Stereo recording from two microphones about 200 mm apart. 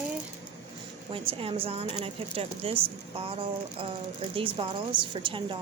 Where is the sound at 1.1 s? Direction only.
25° right (ahead or behind).